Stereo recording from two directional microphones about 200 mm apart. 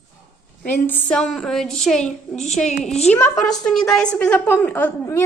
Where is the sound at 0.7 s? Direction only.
10° left (ahead or behind).